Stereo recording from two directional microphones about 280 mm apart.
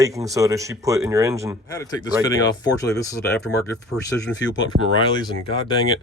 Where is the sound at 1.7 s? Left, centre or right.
Centre.